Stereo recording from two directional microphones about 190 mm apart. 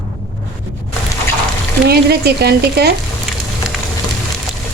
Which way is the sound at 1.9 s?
60° right (ahead or behind).